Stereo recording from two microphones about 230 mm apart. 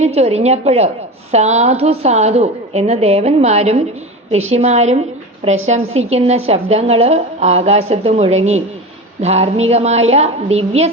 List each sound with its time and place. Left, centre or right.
0.0 s a woman's voice: right